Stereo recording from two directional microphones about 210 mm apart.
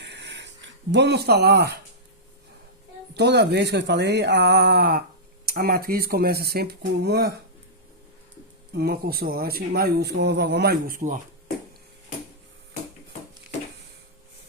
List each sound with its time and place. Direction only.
0.0 s a sound: 55° right (ahead or behind)
3.2 s speech: 55° right (ahead or behind)
8.8 s speech: 45° right (ahead or behind)